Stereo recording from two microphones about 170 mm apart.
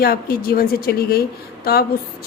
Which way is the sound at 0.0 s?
60° left (ahead or behind).